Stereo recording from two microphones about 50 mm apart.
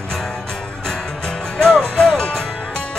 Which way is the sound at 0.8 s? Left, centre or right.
Centre.